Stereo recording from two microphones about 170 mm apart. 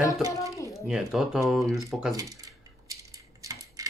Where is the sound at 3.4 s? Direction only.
20° right (ahead or behind).